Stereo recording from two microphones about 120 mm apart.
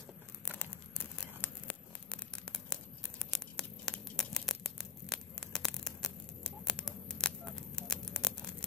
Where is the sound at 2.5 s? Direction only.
5° left (ahead or behind).